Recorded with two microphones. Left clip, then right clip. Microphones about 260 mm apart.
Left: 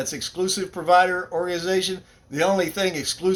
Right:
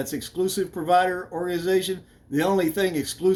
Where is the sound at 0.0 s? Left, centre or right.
Centre.